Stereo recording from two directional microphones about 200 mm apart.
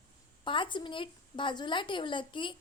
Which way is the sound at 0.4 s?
25° left (ahead or behind).